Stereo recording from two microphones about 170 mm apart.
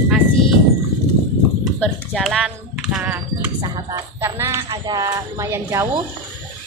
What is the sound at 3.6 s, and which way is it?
Speech, 25° right (ahead or behind).